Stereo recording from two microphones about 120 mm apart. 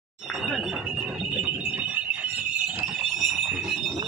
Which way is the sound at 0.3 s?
5° right (ahead or behind).